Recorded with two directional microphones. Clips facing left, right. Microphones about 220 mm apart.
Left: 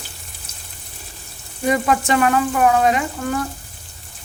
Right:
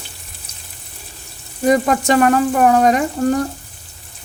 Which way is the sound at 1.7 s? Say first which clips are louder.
Right 4 dB; 40° right (ahead or behind).